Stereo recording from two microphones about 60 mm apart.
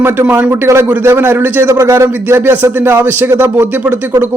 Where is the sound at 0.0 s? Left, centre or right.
Right.